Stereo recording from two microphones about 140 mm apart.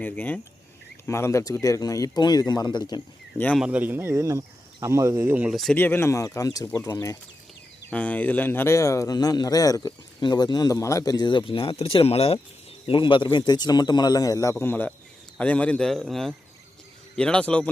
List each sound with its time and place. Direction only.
0.0 s a man's voice: 15° left (ahead or behind); by 3.0 s 30° left (ahead or behind)
3.3 s a man's voice: 10° left (ahead or behind)
3.6 s speech: 10° right (ahead or behind)
5.7 s speech: 15° left (ahead or behind)
7.9 s speech: 10° left (ahead or behind); by 14.5 s 25° left (ahead or behind)
14.5 s a man's voice: 15° left (ahead or behind)